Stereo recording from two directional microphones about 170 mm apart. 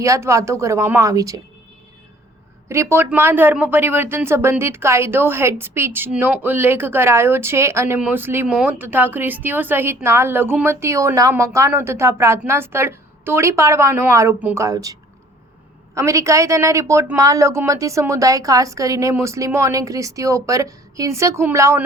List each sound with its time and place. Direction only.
0.0 s speech: 20° right (ahead or behind)
2.6 s speech: 15° right (ahead or behind)
16.0 s speech: 15° right (ahead or behind)